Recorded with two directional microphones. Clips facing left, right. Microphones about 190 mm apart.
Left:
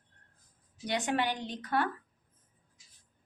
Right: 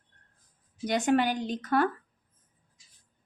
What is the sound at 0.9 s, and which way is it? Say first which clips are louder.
Speech: right 6 dB; 45° right (ahead or behind).